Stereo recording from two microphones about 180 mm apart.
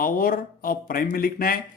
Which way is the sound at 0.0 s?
55° left (ahead or behind).